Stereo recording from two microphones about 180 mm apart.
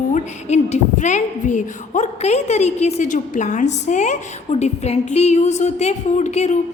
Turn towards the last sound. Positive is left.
turn(degrees=40)  # may be behind; listen again after turning